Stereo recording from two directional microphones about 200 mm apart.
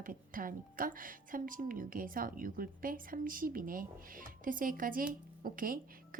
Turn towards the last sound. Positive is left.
turn(degrees=-45)  # may be behind; listen again after turning